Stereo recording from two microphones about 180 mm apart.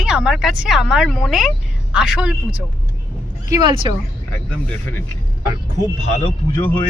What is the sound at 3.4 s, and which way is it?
Speech, 20° right (ahead or behind).